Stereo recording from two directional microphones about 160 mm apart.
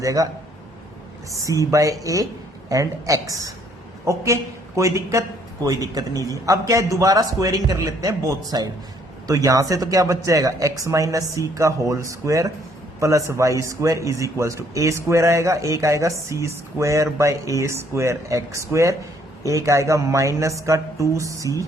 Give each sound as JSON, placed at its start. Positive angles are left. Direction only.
{"t": 0.0, "sound": "a man's voice", "side_deg": -20}
{"t": 1.5, "sound": "a man's voice", "side_deg": -20}